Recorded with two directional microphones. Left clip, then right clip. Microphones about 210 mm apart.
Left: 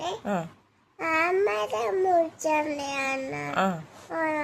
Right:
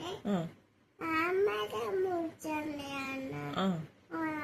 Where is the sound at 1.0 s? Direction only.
45° left (ahead or behind).